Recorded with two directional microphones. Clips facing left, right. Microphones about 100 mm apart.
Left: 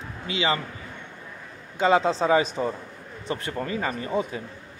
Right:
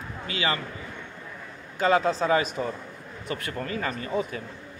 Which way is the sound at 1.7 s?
25° left (ahead or behind).